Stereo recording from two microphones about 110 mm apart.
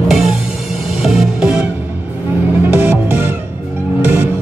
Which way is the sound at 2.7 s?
15° right (ahead or behind).